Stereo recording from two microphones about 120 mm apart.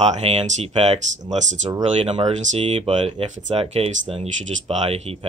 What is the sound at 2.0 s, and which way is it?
Speech, 55° right (ahead or behind).